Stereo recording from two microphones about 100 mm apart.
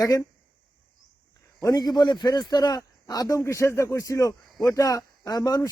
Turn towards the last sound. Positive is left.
turn(degrees=40)  # may be behind; listen again after turning